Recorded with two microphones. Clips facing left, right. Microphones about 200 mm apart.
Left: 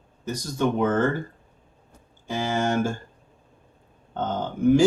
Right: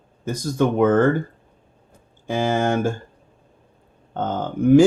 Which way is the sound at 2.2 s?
55° right (ahead or behind).